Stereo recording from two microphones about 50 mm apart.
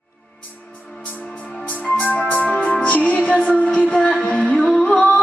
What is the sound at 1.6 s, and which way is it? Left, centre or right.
Music, left.